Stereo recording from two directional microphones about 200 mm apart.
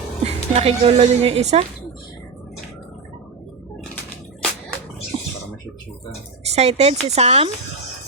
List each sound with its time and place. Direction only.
0.3 s a woman's voice: 30° right (ahead or behind)
5.1 s a sound: 25° right (ahead or behind)
6.5 s a woman's voice: 35° right (ahead or behind)